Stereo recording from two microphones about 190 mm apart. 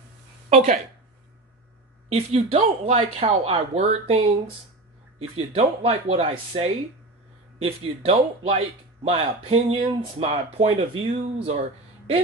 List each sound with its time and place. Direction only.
0.5 s speech: 35° right (ahead or behind)
2.0 s speech: 30° right (ahead or behind)
5.5 s speech: 35° right (ahead or behind)